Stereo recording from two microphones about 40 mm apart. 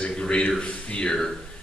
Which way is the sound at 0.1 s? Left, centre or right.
Left.